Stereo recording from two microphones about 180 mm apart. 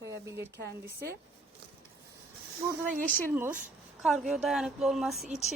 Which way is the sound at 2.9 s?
50° right (ahead or behind).